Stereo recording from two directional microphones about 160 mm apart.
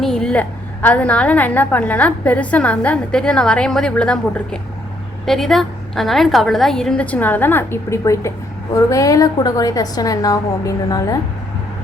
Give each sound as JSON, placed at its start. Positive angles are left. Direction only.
{"t": 0.0, "sound": "a woman's voice", "side_deg": 5}